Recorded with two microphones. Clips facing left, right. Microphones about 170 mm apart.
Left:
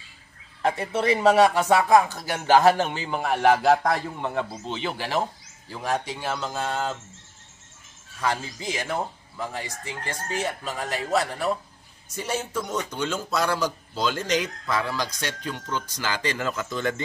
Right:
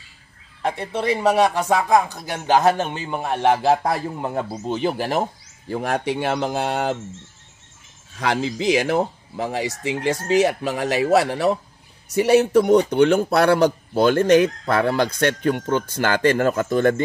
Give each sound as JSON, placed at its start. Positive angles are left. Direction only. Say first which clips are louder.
{"t": 0.9, "sound": "speech", "louder": "even", "side_deg": -10}
{"t": 4.2, "sound": "speech", "louder": "right 3 dB", "side_deg": -40}
{"t": 5.7, "sound": "a man's voice", "louder": "right 5 dB", "side_deg": -60}
{"t": 8.2, "sound": "speech", "louder": "right 6 dB", "side_deg": -85}
{"t": 12.1, "sound": "a man's voice", "louder": "right 14 dB", "side_deg": -70}